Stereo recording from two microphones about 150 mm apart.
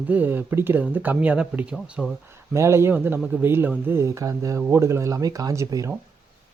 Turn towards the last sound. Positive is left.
turn(degrees=-20)  # may be behind; listen again after turning